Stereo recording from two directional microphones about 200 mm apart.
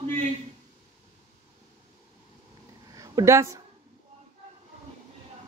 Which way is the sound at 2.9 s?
15° right (ahead or behind).